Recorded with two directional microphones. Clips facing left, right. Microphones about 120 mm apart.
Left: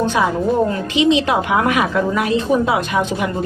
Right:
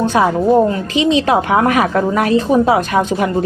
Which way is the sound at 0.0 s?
35° right (ahead or behind).